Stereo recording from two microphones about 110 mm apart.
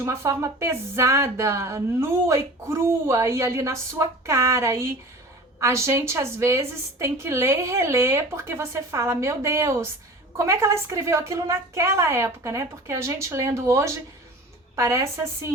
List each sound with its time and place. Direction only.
0.0 s speech: 25° right (ahead or behind)